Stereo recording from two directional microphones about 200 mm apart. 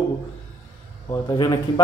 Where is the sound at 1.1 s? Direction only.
15° left (ahead or behind).